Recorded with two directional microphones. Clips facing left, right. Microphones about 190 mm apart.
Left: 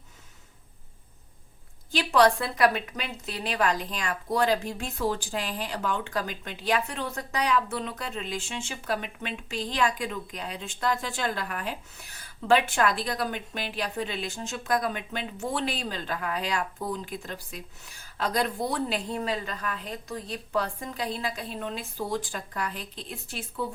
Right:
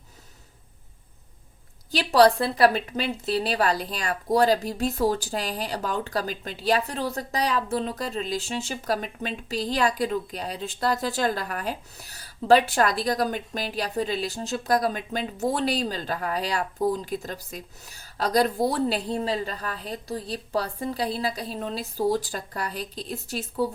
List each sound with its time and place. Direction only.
1.9 s a woman's voice: 35° right (ahead or behind)